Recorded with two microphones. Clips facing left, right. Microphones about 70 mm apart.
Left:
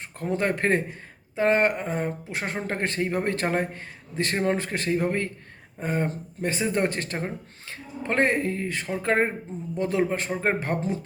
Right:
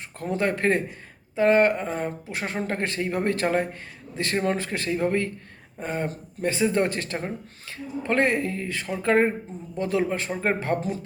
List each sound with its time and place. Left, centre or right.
0.2 s speech: left